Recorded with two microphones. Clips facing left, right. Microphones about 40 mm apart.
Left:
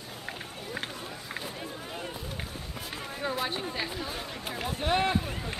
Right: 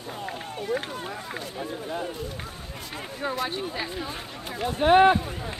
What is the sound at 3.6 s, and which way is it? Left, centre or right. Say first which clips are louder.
Speech: right 3 dB; centre.